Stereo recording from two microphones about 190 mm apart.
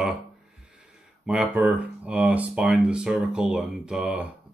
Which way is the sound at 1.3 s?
5° right (ahead or behind).